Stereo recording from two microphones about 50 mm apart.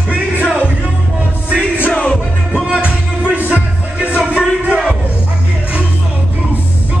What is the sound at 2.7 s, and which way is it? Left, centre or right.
Music, left.